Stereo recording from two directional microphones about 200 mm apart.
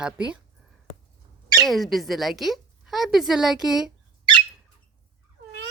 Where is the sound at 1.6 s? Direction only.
Centre (ahead or behind).